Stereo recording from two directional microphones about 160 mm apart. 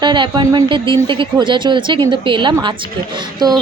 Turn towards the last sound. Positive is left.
turn(degrees=-25)  # may be behind; listen again after turning